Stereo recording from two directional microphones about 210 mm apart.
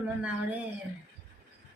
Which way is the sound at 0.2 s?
5° right (ahead or behind).